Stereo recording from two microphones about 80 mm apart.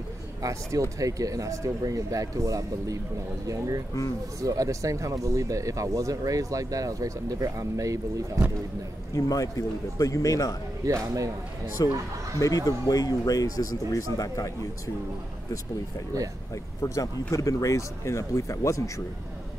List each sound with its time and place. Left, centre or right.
0.4 s speech: right
9.1 s speech: left
10.9 s speech: right
11.8 s speech: left
16.8 s speech: left